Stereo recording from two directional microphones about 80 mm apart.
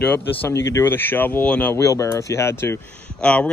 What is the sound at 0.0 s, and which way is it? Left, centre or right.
Speech, centre.